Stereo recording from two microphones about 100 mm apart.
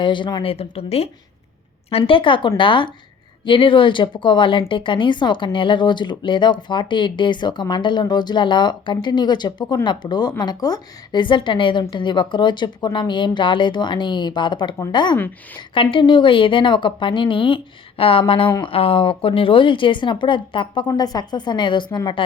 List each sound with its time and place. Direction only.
0.0 s speech: 50° left (ahead or behind)
0.4 s speech: 85° left
1.9 s a woman's voice: 70° left (ahead or behind); by 15.2 s 45° left (ahead or behind)
15.7 s a woman's voice: 60° left (ahead or behind)